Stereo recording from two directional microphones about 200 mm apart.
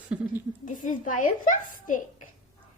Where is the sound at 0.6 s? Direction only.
40° left (ahead or behind).